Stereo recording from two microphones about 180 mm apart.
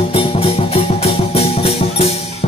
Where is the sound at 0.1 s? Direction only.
30° left (ahead or behind).